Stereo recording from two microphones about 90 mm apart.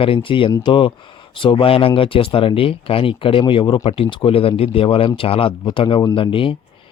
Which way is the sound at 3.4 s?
65° left (ahead or behind).